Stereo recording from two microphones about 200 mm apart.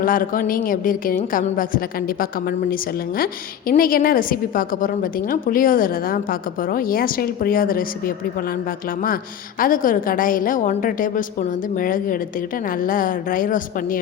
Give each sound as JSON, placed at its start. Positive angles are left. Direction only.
{"t": 0.0, "sound": "a woman's voice", "side_deg": 45}
{"t": 9.6, "sound": "a woman's voice", "side_deg": 45}